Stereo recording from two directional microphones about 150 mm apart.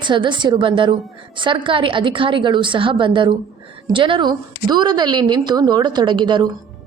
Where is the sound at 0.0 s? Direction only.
30° right (ahead or behind).